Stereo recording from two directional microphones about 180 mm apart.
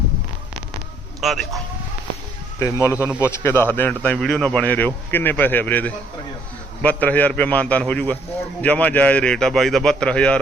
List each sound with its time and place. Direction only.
1.2 s a man's voice: centre (ahead or behind)
2.6 s speech: 15° left (ahead or behind)
2.9 s a man's voice: 10° right (ahead or behind)
3.2 s a man's voice: 15° left (ahead or behind)